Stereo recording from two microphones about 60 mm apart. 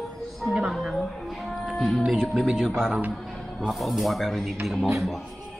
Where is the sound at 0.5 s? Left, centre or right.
Centre.